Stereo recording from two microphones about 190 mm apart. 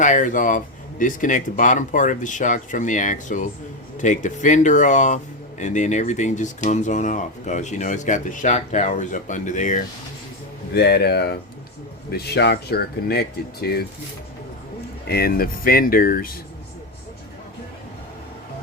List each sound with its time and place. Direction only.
0.0 s speech: 40° left (ahead or behind)
10.8 s speech: 60° left (ahead or behind)
15.0 s speech: 55° left (ahead or behind)